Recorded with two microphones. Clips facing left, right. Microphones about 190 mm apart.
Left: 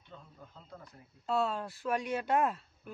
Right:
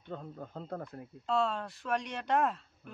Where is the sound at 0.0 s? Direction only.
55° right (ahead or behind).